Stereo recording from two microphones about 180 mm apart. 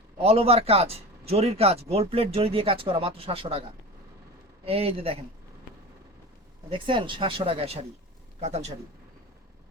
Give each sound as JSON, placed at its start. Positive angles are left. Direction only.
{"t": 0.2, "sound": "speech", "side_deg": -35}
{"t": 4.6, "sound": "speech", "side_deg": -30}
{"t": 6.7, "sound": "speech", "side_deg": -30}